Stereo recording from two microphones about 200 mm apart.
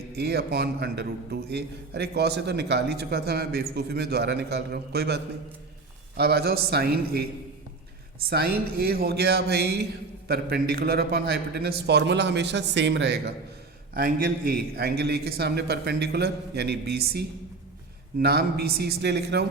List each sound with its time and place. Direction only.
0.2 s a man's voice: 55° right (ahead or behind)
8.3 s a man's voice: 50° right (ahead or behind)
13.9 s a man's voice: 45° right (ahead or behind)